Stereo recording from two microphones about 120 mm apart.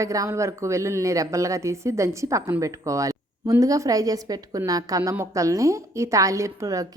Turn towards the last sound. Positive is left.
turn(degrees=-25)  # may be behind; listen again after turning